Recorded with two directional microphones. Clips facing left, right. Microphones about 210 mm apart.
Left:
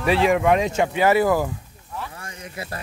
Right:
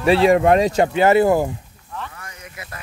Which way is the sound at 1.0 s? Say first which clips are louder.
Right 3 dB; 25° right (ahead or behind).